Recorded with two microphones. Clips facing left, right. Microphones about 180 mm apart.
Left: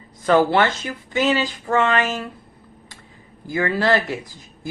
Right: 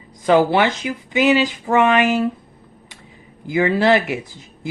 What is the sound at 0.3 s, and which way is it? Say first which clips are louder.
Speech: right 2 dB; 15° right (ahead or behind).